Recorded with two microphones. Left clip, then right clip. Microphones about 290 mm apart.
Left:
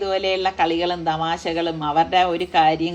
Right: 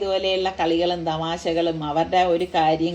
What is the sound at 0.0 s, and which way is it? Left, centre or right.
Speech, left.